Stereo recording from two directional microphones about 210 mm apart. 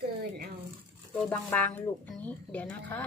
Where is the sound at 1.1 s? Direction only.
10° left (ahead or behind).